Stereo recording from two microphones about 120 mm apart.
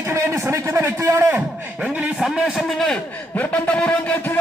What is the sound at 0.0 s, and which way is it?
A man's voice, 25° right (ahead or behind).